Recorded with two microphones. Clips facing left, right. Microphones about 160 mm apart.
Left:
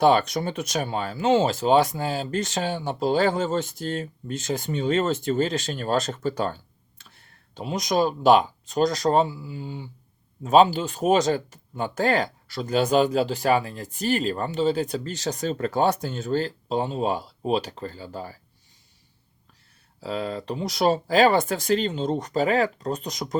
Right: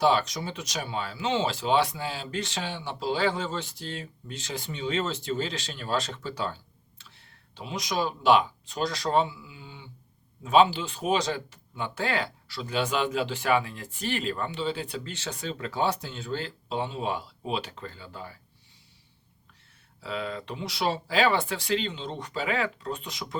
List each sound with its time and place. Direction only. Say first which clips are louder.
0.0 s speech: left 5 dB; 55° left (ahead or behind)
20.0 s speech: left 4 dB; 40° left (ahead or behind)